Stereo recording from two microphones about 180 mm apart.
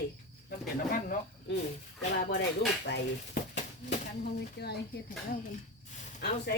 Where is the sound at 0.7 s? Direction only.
50° left (ahead or behind).